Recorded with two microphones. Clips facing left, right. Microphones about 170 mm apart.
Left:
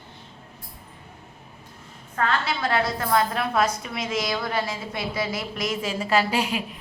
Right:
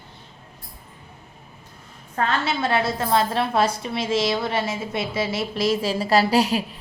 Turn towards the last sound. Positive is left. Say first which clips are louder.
# right 6 dB
turn(degrees=-35)  # may be behind; listen again after turning